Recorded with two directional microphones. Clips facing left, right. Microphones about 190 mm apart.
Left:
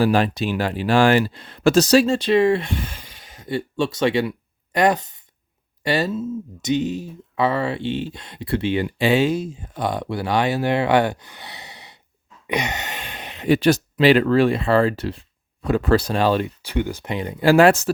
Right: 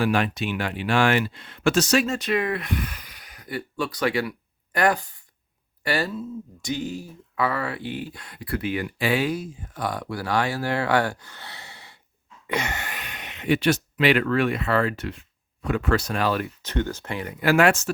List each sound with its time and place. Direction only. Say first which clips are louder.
0.0 s speech: left 5 dB; 35° left (ahead or behind)
16.6 s speech: left 3 dB; 10° left (ahead or behind); by 17.9 s 35° left (ahead or behind)